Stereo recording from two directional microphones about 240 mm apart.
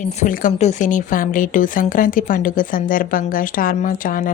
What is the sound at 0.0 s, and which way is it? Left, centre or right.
Speech, left.